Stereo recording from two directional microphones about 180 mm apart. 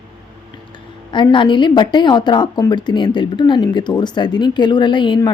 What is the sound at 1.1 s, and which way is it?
A woman's voice, 25° left (ahead or behind).